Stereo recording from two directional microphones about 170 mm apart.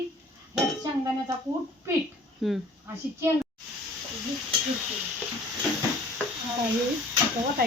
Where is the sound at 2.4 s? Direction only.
Centre (ahead or behind).